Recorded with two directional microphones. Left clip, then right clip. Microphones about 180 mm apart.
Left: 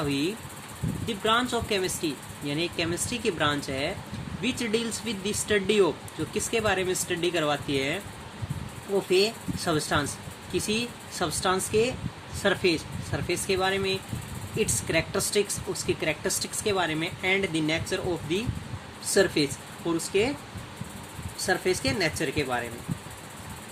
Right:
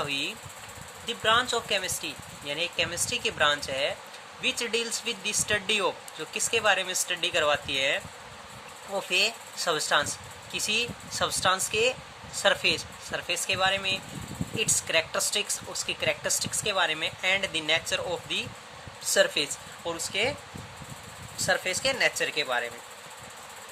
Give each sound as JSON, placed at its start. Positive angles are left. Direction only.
{"t": 1.0, "sound": "speech", "side_deg": -25}
{"t": 9.0, "sound": "speech", "side_deg": -25}
{"t": 21.4, "sound": "speech", "side_deg": -25}